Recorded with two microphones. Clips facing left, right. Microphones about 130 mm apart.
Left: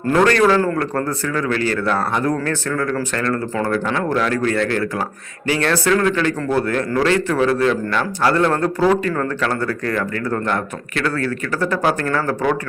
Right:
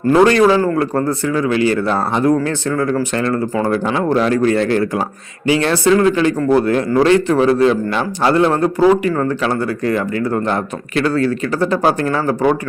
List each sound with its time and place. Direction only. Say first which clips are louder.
0.1 s a man's voice: right 4 dB; 15° right (ahead or behind)